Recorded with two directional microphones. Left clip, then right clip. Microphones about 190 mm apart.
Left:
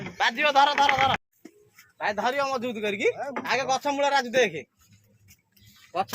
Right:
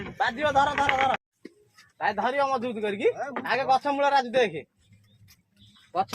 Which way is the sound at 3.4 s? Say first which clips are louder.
Right 2 dB; 20° right (ahead or behind).